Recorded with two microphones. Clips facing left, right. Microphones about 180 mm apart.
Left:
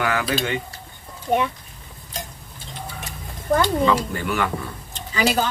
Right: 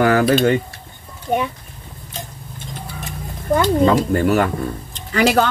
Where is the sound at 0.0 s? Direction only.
40° right (ahead or behind).